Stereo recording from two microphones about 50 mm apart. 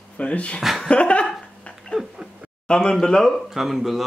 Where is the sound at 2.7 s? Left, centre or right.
Centre.